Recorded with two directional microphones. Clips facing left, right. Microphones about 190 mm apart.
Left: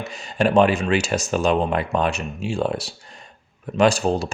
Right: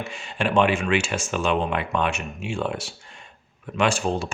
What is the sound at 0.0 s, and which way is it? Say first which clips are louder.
Speech: left 5 dB; 40° left (ahead or behind).